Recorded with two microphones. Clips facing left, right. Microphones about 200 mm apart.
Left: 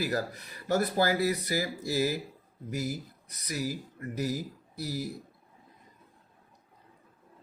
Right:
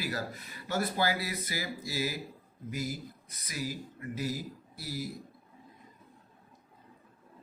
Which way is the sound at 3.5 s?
45° left (ahead or behind).